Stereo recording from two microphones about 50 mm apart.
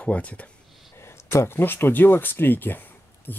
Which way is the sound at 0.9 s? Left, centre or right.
Left.